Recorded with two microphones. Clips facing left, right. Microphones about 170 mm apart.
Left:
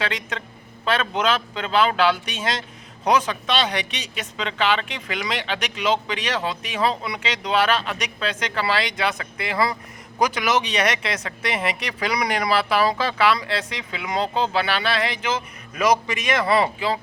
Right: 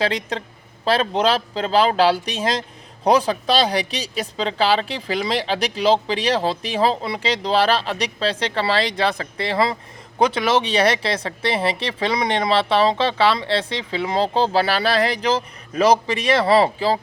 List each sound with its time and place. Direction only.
0.0 s speech: 35° right (ahead or behind)